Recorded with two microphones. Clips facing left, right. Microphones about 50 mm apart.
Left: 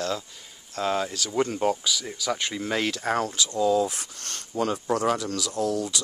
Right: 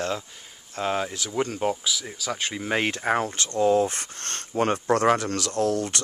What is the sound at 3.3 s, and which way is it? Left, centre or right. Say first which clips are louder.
Speech: right 2 dB; right.